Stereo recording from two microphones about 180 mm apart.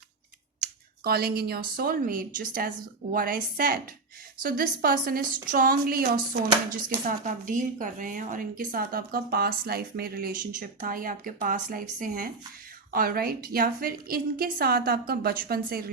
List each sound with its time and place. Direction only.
1.0 s a woman's voice: 60° right (ahead or behind)